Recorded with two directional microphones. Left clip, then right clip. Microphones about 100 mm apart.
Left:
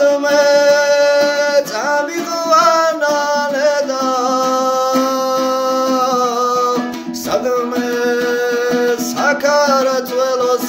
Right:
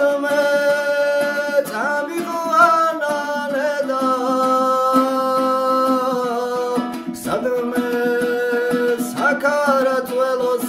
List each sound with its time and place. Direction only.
0.0 s music: 40° right (ahead or behind)
9.5 s music: 40° right (ahead or behind)